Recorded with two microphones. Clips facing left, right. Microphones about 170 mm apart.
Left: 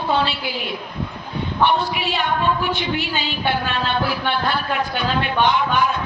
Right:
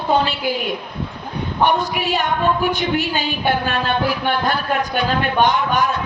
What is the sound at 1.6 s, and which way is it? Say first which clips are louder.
A woman's voice: right 1 dB; 45° right (ahead or behind).